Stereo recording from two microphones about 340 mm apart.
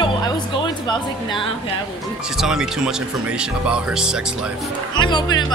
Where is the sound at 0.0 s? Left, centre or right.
Centre.